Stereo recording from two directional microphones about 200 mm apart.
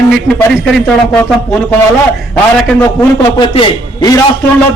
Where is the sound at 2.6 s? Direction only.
5° left (ahead or behind).